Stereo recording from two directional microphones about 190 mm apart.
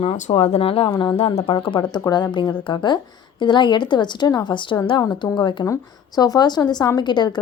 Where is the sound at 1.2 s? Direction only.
30° left (ahead or behind).